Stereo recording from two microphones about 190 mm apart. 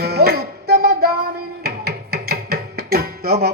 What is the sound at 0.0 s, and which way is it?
Music, 55° right (ahead or behind).